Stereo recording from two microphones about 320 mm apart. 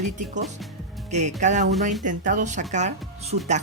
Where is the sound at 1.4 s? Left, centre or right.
Right.